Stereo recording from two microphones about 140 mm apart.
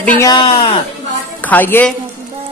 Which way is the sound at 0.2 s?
30° left (ahead or behind).